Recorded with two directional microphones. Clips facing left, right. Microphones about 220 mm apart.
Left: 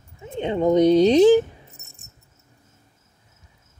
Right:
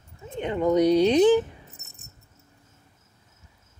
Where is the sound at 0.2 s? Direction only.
25° left (ahead or behind).